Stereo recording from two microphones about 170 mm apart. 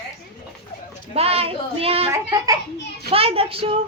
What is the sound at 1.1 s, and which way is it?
Speech, 35° right (ahead or behind).